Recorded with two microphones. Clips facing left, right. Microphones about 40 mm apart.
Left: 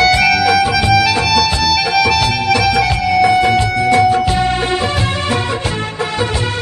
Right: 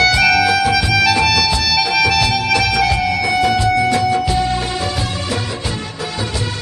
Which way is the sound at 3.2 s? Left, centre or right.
Left.